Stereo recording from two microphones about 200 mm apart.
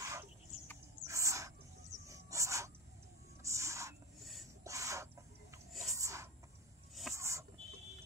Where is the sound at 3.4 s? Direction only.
15° right (ahead or behind).